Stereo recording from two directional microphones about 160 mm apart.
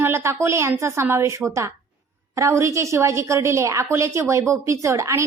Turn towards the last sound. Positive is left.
turn(degrees=-20)  # may be behind; listen again after turning